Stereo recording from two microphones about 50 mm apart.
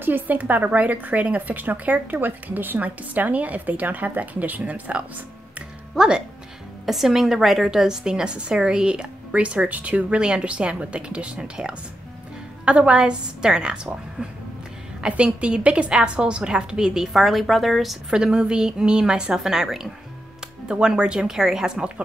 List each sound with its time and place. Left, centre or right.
0.0 s a woman's voice: right
5.9 s a woman's voice: centre
6.9 s a woman's voice: centre
15.0 s a woman's voice: centre
18.1 s a woman's voice: centre